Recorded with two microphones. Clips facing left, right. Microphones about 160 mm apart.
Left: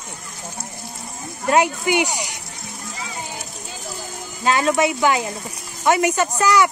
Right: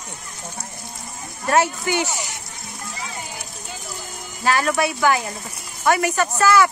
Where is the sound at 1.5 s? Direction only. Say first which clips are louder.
Left 2 dB; 15° left (ahead or behind).